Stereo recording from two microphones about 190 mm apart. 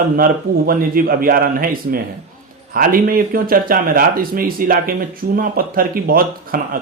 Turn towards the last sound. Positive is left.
turn(degrees=-50)  # may be behind; listen again after turning